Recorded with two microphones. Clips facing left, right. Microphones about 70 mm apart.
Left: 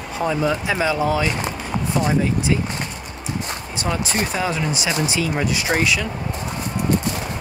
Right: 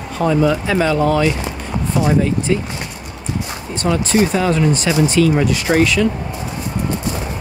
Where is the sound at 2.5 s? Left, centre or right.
Centre.